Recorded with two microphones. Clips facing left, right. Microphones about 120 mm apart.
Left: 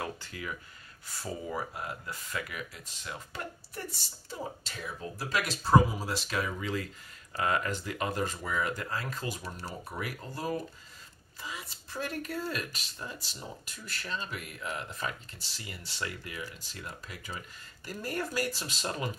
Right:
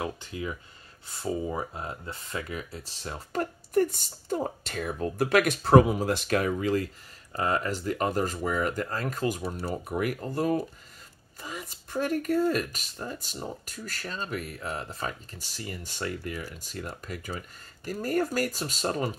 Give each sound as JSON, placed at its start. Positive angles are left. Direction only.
{"t": 0.0, "sound": "speech", "side_deg": -20}